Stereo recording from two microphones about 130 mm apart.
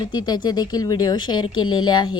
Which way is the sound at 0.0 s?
35° left (ahead or behind).